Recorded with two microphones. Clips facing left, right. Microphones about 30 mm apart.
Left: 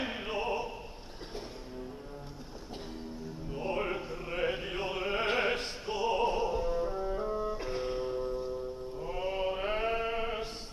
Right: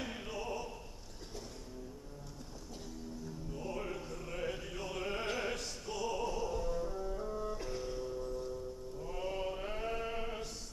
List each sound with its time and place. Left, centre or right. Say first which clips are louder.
0.0 s music: left 7 dB; left
3.4 s music: left 8 dB; left
4.1 s opera: left 7 dB; left
9.0 s chant: left 6 dB; left